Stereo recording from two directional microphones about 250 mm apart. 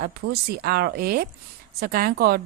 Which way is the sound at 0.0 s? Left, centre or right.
Right.